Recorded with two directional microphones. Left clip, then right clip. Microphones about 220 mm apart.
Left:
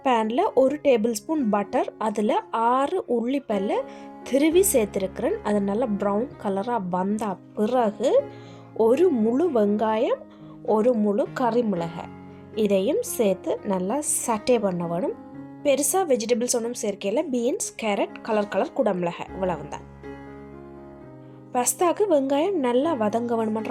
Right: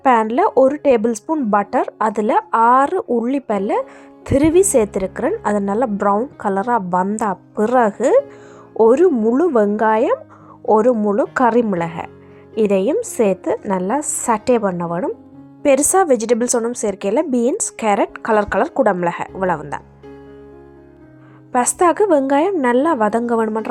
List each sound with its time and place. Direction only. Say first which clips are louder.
0.0 s a woman's voice: right 8 dB; 15° right (ahead or behind)
15.6 s a woman's voice: right 8 dB; 25° right (ahead or behind)
21.5 s a woman's voice: right 8 dB; 25° right (ahead or behind)